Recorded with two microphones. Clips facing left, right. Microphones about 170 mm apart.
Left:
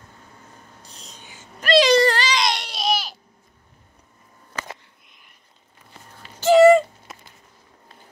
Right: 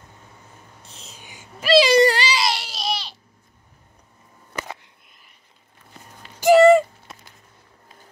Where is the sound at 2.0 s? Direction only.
10° right (ahead or behind).